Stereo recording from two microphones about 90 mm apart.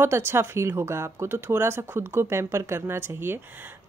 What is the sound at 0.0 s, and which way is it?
Speech, 25° right (ahead or behind).